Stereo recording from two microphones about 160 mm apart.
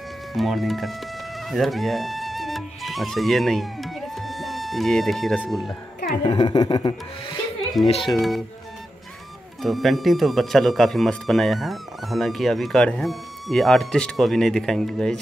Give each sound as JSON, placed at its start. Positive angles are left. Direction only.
{"t": 0.3, "sound": "speech", "side_deg": 0}
{"t": 6.2, "sound": "speech", "side_deg": 30}
{"t": 7.8, "sound": "speech", "side_deg": 0}
{"t": 9.6, "sound": "speech", "side_deg": 0}